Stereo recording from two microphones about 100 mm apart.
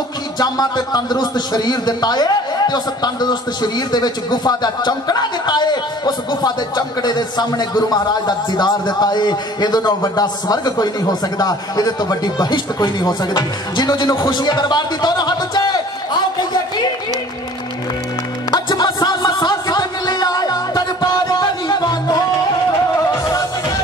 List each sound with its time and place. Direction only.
0.4 s a man's voice: 45° left (ahead or behind)
18.5 s music: 45° left (ahead or behind)